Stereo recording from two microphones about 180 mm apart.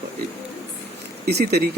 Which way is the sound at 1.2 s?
65° right (ahead or behind).